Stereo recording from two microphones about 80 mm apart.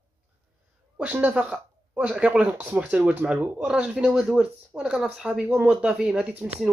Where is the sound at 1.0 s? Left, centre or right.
Centre.